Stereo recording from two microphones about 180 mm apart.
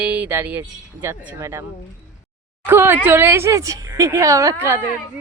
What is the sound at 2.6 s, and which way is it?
Speech, 10° right (ahead or behind).